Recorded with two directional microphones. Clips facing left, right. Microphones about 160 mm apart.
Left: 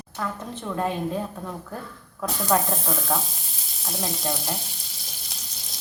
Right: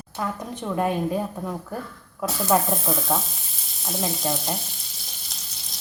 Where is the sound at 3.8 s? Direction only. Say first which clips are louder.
Right 2 dB; centre (ahead or behind).